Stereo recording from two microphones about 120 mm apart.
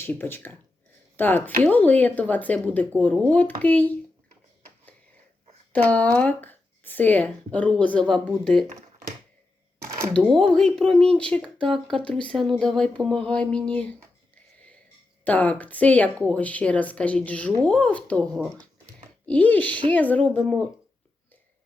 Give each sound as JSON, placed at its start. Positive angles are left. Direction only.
{"t": 0.0, "sound": "speech", "side_deg": 15}
{"t": 5.7, "sound": "speech", "side_deg": 10}
{"t": 9.7, "sound": "camera", "side_deg": -20}
{"t": 10.1, "sound": "speech", "side_deg": 5}
{"t": 15.2, "sound": "speech", "side_deg": 15}